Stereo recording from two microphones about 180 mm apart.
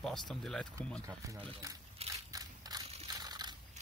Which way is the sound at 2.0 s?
35° right (ahead or behind).